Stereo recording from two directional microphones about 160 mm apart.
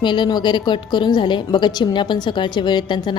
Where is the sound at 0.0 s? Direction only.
30° left (ahead or behind).